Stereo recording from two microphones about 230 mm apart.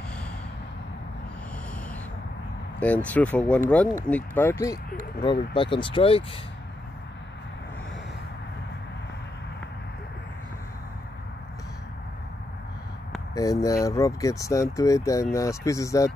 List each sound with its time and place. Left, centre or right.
2.8 s speech: centre; by 6.2 s left
13.3 s speech: centre